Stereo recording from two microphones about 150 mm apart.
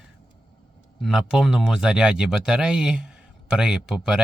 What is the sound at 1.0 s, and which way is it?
A man's voice, 5° right (ahead or behind).